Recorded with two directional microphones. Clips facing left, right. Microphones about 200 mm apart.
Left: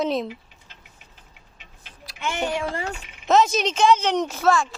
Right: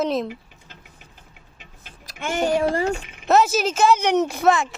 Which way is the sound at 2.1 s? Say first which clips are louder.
Right 5 dB; 45° right (ahead or behind).